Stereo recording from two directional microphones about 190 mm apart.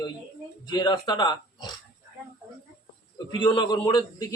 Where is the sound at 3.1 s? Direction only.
25° left (ahead or behind).